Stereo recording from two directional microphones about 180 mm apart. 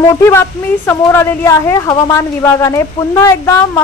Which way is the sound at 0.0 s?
15° left (ahead or behind).